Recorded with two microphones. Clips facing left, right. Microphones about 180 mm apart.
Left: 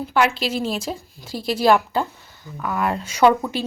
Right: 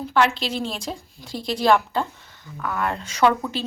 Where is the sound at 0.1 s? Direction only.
10° left (ahead or behind).